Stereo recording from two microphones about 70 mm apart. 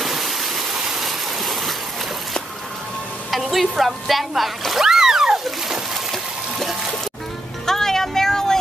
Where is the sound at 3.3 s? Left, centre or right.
Centre.